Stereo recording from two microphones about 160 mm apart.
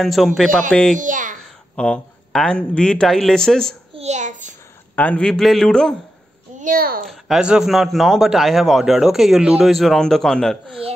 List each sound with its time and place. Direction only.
0.0 s a man's voice: centre (ahead or behind)
0.9 s a child's voice: 55° right (ahead or behind)
1.8 s a man's voice: 5° left (ahead or behind)
3.9 s a sound: 45° right (ahead or behind)
4.9 s a man's voice: 10° left (ahead or behind)
6.6 s a child's voice: 65° right (ahead or behind)
7.1 s a man's voice: 5° right (ahead or behind)